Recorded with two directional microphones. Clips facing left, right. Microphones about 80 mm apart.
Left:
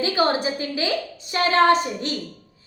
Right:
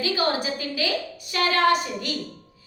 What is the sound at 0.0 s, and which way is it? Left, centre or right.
A woman's voice, left.